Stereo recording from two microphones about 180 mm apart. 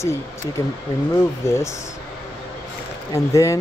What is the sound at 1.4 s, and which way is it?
Speech, 15° left (ahead or behind).